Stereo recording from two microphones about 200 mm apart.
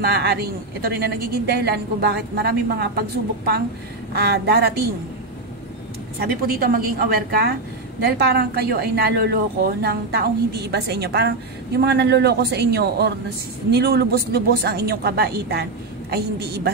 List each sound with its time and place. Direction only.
0.0 s a woman's voice: 55° right (ahead or behind)
4.1 s a woman's voice: 55° right (ahead or behind)
6.1 s a woman's voice: 50° right (ahead or behind)